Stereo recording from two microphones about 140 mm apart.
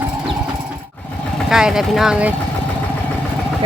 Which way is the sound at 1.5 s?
5° right (ahead or behind).